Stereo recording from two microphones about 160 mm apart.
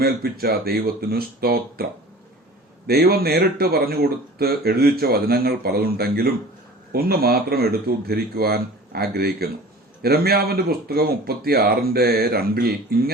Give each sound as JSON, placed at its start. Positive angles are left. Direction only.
{"t": 0.0, "sound": "speech", "side_deg": -75}